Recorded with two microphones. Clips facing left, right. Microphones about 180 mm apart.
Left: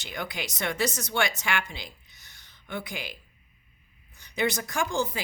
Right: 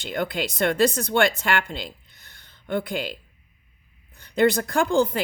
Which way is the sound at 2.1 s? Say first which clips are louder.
Right 4 dB; 55° right (ahead or behind).